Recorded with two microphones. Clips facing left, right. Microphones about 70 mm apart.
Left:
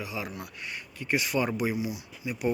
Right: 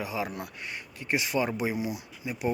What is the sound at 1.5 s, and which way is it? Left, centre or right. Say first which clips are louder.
Speech: even; right.